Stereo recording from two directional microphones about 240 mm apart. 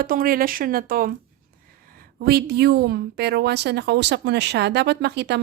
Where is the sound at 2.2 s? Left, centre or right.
Right.